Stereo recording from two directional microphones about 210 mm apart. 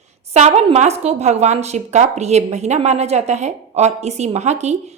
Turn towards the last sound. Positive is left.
turn(degrees=-35)  # may be behind; listen again after turning